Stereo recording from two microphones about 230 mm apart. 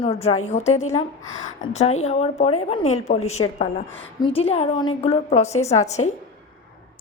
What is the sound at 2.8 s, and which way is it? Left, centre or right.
Speech, left.